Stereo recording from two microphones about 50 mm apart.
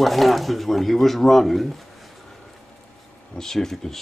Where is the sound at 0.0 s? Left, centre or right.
Centre.